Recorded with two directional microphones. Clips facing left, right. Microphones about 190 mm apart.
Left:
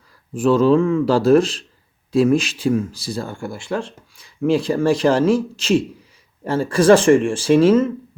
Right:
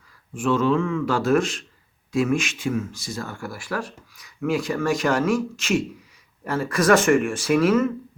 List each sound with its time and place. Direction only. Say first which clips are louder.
0.3 s speech: left 6 dB; 35° left (ahead or behind)